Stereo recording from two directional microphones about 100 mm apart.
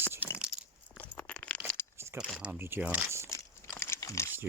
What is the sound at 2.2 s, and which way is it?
Speech, 5° right (ahead or behind).